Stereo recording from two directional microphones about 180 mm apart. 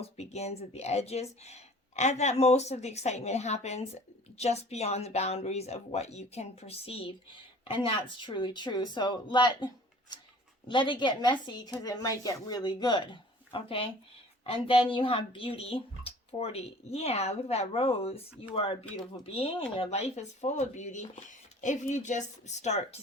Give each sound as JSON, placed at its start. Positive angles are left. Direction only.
{"t": 0.2, "sound": "speech", "side_deg": 35}
{"t": 10.7, "sound": "speech", "side_deg": 25}